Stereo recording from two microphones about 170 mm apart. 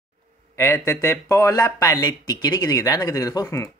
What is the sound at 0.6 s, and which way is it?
Speech, 20° left (ahead or behind).